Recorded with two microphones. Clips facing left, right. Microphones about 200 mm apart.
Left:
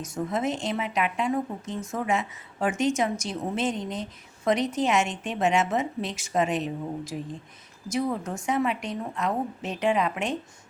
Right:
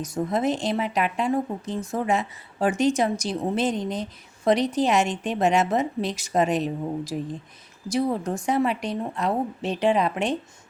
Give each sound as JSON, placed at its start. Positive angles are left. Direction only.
{"t": 0.0, "sound": "a woman's voice", "side_deg": -35}